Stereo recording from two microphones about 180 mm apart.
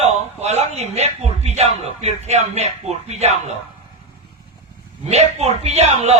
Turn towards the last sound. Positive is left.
turn(degrees=-35)  # may be behind; listen again after turning